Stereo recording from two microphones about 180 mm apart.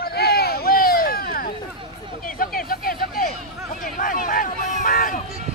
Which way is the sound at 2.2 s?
50° left (ahead or behind).